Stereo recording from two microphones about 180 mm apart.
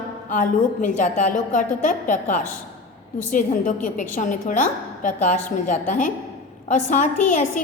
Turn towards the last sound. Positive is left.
turn(degrees=45)  # may be behind; listen again after turning